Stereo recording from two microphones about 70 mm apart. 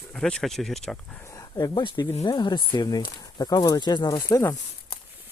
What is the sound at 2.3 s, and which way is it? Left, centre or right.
Speech, left.